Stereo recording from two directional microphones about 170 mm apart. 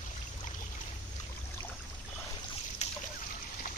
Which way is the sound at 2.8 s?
40° left (ahead or behind).